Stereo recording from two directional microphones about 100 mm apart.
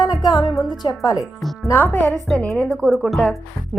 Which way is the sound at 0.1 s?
40° left (ahead or behind).